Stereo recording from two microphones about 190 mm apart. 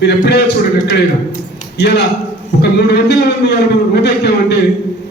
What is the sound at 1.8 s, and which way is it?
A man's voice, 60° left (ahead or behind).